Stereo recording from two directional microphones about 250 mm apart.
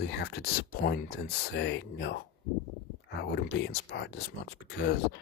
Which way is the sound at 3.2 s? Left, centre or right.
Left.